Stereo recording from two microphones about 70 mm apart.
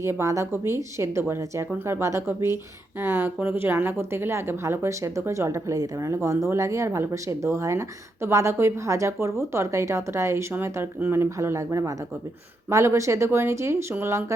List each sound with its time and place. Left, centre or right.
0.0 s speech: right